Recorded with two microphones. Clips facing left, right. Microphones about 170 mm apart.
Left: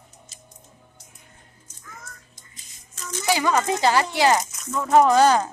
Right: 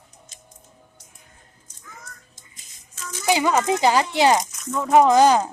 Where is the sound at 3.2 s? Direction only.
20° right (ahead or behind).